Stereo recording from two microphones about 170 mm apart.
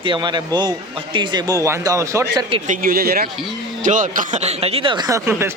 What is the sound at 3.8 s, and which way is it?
Speech, 50° right (ahead or behind).